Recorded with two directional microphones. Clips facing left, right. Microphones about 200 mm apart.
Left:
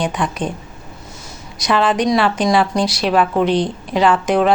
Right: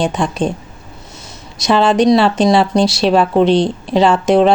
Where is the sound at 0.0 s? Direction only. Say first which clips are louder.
Right 4 dB; 25° right (ahead or behind).